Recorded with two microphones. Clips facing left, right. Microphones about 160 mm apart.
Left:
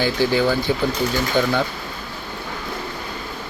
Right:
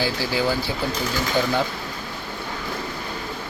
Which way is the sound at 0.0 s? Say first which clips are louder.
Left 5 dB; 5° right (ahead or behind).